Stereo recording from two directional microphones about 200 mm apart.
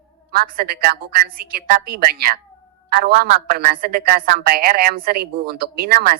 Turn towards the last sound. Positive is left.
turn(degrees=-45)  # may be behind; listen again after turning